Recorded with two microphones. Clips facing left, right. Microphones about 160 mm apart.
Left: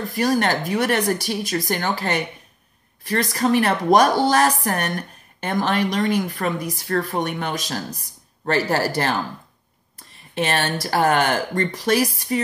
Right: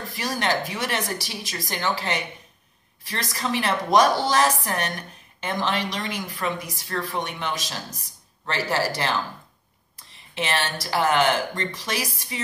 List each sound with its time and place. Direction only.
0.1 s a woman's voice: 40° left (ahead or behind)
3.1 s speech: 60° left (ahead or behind)
3.4 s a woman's voice: 50° left (ahead or behind)
10.3 s a woman's voice: 50° left (ahead or behind)